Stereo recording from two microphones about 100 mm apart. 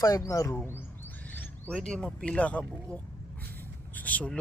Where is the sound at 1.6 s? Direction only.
10° left (ahead or behind).